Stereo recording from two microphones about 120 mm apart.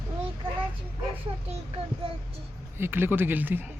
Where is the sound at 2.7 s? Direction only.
20° right (ahead or behind).